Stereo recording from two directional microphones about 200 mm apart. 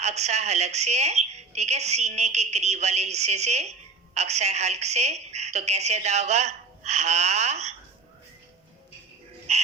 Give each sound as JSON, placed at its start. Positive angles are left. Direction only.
{"t": 0.0, "sound": "a woman's voice", "side_deg": -35}
{"t": 9.5, "sound": "dog", "side_deg": -35}